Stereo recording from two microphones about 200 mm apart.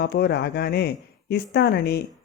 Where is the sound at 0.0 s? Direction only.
55° left (ahead or behind).